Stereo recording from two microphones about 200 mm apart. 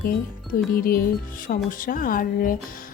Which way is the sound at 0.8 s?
45° left (ahead or behind).